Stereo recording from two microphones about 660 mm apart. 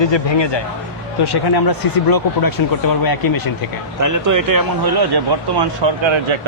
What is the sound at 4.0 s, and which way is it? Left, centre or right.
Speech, right.